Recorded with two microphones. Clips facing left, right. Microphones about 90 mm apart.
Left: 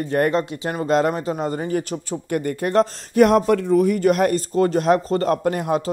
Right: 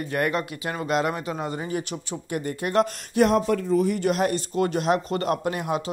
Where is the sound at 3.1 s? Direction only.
65° left (ahead or behind); by 4.4 s 50° left (ahead or behind).